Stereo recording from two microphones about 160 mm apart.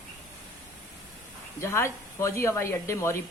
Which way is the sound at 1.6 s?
15° left (ahead or behind).